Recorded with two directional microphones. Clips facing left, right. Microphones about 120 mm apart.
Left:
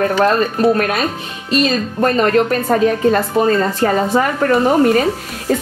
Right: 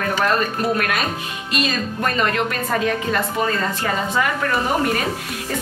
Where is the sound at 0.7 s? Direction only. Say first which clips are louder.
Left 5 dB; 30° left (ahead or behind).